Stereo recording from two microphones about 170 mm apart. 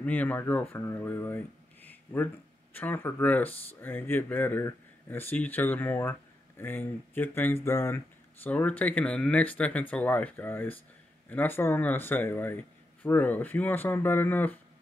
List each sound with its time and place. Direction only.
0.0 s a man's voice: 10° left (ahead or behind)